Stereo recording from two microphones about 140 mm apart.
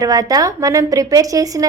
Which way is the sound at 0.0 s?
25° right (ahead or behind).